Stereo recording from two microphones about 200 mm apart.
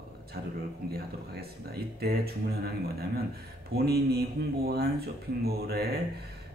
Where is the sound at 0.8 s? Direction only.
50° right (ahead or behind).